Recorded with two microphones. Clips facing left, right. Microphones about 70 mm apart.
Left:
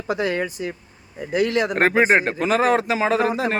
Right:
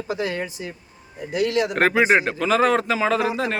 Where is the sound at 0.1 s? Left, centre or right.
Left.